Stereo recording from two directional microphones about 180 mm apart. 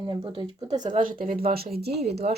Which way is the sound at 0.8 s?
45° right (ahead or behind).